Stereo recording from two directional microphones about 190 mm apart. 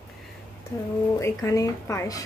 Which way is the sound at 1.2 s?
15° left (ahead or behind).